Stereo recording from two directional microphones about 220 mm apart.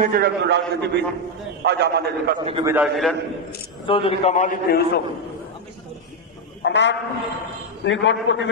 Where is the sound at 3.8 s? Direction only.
25° left (ahead or behind).